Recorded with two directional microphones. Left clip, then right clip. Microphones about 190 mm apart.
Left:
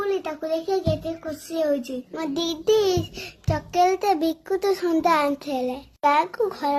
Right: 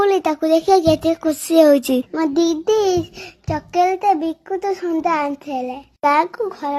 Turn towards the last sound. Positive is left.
turn(degrees=-5)  # may be behind; listen again after turning